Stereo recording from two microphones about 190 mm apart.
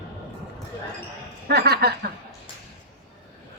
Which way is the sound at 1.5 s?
55° right (ahead or behind).